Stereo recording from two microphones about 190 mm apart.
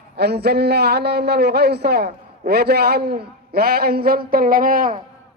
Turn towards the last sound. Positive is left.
turn(degrees=-50)  # may be behind; listen again after turning